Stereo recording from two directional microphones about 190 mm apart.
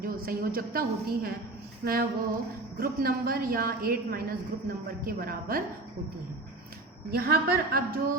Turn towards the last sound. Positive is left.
turn(degrees=-55)  # may be behind; listen again after turning